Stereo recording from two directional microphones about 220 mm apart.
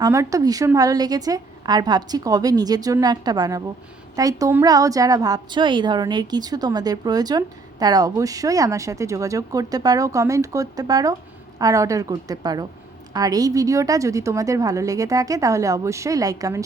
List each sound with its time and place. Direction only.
0.0 s a woman's voice: 15° right (ahead or behind)